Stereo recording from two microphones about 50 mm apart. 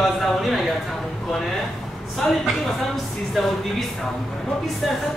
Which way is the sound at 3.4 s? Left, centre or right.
Centre.